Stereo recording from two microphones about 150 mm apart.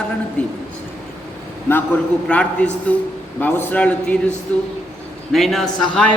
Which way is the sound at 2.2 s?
5° left (ahead or behind).